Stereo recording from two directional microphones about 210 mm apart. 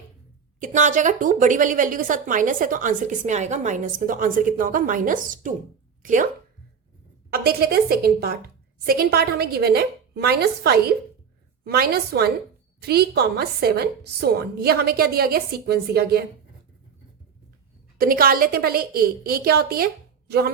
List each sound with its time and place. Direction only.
0.6 s a woman's voice: 35° right (ahead or behind)
7.3 s a woman's voice: 45° right (ahead or behind)
17.9 s a woman's voice: 45° right (ahead or behind)